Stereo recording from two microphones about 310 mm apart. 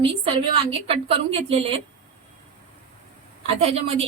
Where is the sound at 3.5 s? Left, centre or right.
Centre.